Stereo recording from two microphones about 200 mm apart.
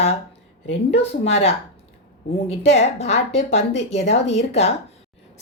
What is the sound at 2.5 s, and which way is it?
A woman's voice, 30° left (ahead or behind).